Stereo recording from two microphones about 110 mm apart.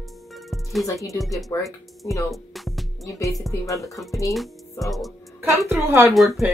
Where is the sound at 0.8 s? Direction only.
30° left (ahead or behind).